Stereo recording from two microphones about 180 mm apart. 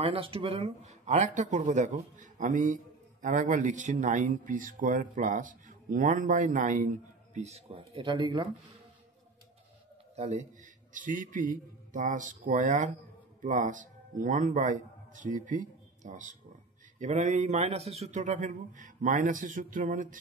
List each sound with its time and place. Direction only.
0.0 s speech: 30° right (ahead or behind)
10.1 s a man's voice: 40° right (ahead or behind)